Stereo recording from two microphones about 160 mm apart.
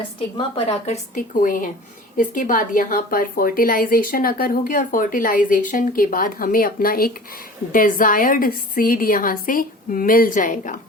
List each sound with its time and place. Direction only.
0.3 s a woman's voice: 35° left (ahead or behind)
1.1 s a woman's voice: 55° left (ahead or behind)